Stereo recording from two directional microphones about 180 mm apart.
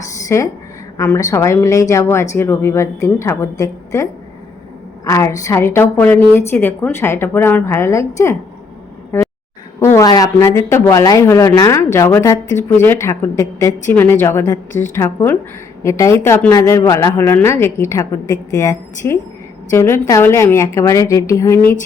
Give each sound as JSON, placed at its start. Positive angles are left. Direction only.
{"t": 0.3, "sound": "a woman's voice", "side_deg": 15}